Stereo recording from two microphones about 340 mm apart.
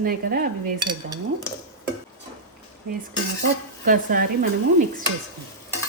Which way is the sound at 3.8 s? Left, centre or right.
Right.